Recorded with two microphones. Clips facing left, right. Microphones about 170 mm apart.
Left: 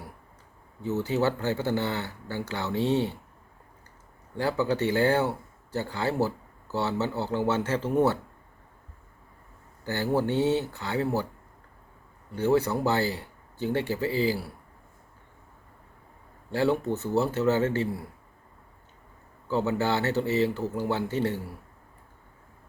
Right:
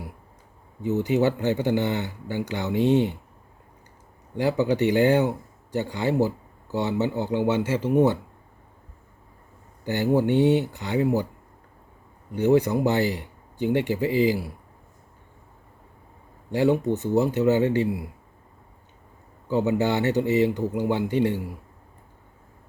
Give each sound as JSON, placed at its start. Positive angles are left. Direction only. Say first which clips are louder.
{"t": 0.8, "sound": "speech", "louder": "right 4 dB", "side_deg": -15}
{"t": 4.4, "sound": "speech", "louder": "right 4 dB", "side_deg": -15}
{"t": 9.8, "sound": "speech", "louder": "right 5 dB", "side_deg": -20}
{"t": 12.3, "sound": "speech", "louder": "right 4 dB", "side_deg": -15}
{"t": 16.5, "sound": "speech", "louder": "right 4 dB", "side_deg": -15}
{"t": 19.5, "sound": "speech", "louder": "right 3 dB", "side_deg": -15}